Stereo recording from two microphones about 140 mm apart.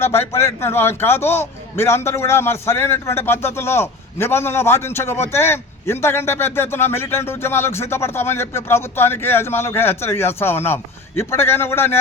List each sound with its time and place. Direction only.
0.0 s a man's voice: 15° left (ahead or behind)